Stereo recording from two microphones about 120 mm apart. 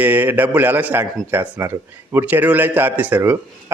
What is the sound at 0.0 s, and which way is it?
A man's voice, 15° right (ahead or behind).